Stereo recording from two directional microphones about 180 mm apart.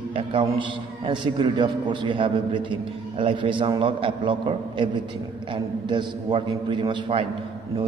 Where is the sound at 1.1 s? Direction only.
25° right (ahead or behind).